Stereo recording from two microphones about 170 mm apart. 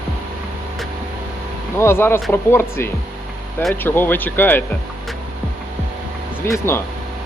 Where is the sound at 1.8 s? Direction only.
15° left (ahead or behind).